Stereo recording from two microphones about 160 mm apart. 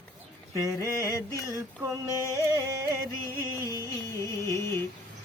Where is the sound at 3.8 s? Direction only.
20° left (ahead or behind).